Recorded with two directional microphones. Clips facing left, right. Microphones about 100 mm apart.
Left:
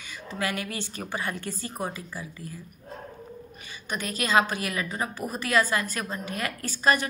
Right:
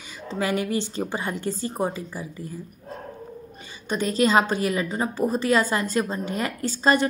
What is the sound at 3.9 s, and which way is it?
A woman's voice, 30° right (ahead or behind).